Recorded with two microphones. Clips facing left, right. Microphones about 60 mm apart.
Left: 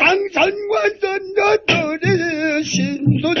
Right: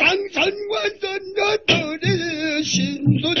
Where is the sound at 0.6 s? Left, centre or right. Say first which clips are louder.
Left 6 dB; left.